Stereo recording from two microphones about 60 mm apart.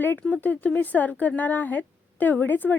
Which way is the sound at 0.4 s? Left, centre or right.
Left.